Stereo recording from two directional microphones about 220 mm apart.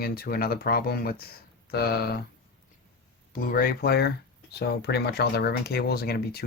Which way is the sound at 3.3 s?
40° left (ahead or behind).